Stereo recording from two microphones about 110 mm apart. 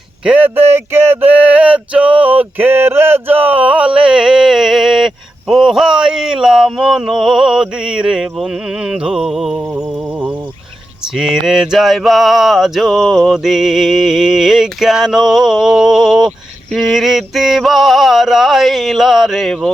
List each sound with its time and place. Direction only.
0.3 s speech: 15° right (ahead or behind)
1.3 s male singing: 15° right (ahead or behind)
9.6 s mantra: 15° right (ahead or behind)
11.1 s mantra: 5° right (ahead or behind)